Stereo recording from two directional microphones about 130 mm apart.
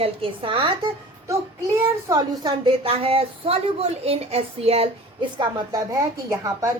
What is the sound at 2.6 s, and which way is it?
A woman's voice, 45° right (ahead or behind).